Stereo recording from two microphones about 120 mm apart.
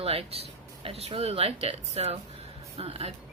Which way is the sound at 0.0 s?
55° right (ahead or behind).